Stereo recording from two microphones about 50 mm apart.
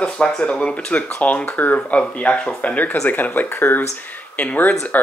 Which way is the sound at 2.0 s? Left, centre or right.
Left.